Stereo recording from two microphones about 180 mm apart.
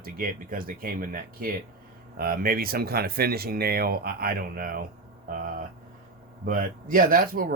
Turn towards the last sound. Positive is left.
turn(degrees=-55)  # may be behind; listen again after turning